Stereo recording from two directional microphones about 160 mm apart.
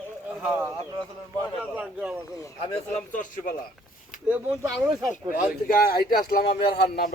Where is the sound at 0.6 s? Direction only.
20° right (ahead or behind).